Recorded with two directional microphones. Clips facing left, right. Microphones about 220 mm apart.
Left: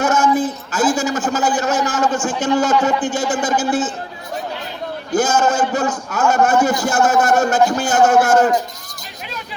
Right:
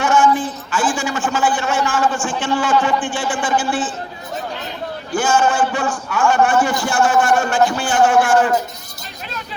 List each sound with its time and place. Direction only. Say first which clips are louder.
0.0 s a sound: even; 40° left (ahead or behind)
0.7 s a man's voice: left 2 dB; 40° left (ahead or behind)
5.1 s a man's voice: left 1 dB; 40° left (ahead or behind)